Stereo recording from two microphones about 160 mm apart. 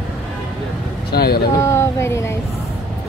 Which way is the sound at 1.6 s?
15° left (ahead or behind).